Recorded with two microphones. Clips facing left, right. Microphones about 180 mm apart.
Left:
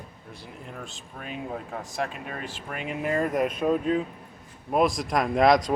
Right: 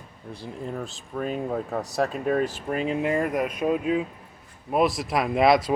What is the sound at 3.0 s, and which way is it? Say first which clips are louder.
Speech: left 4 dB; 15° right (ahead or behind).